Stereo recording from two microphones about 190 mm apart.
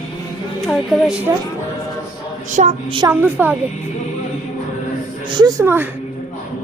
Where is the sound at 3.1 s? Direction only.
10° right (ahead or behind).